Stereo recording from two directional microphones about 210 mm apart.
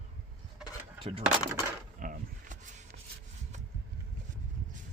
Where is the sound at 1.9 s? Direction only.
40° right (ahead or behind).